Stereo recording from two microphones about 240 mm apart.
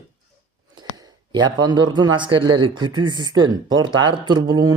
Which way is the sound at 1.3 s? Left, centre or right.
Centre.